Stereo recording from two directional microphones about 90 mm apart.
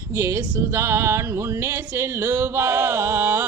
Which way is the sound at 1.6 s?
30° right (ahead or behind).